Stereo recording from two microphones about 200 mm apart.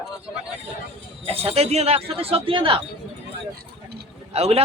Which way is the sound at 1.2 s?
30° right (ahead or behind).